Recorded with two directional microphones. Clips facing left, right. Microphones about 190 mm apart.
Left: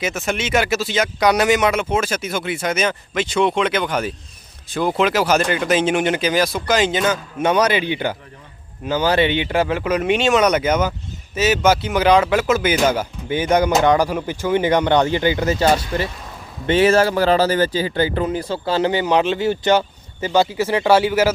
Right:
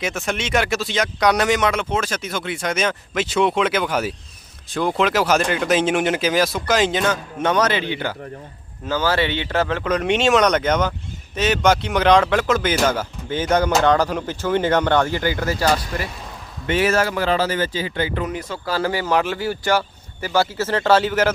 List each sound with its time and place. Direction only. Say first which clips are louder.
0.0 s speech: left 2 dB; 5° left (ahead or behind)